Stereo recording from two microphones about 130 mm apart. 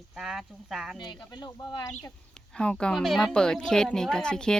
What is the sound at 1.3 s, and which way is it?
Speech, 30° left (ahead or behind).